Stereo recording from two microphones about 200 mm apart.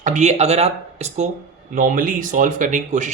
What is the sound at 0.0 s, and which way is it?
Speech, 35° right (ahead or behind).